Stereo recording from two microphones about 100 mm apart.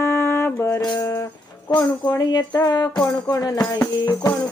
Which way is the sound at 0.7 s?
40° left (ahead or behind).